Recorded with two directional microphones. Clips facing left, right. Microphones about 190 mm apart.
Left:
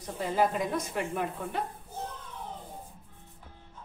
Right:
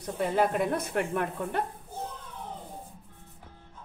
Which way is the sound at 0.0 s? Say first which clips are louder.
Right 2 dB; 60° right (ahead or behind).